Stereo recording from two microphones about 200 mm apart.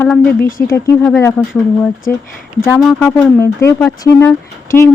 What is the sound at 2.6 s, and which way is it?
Speech, 5° left (ahead or behind).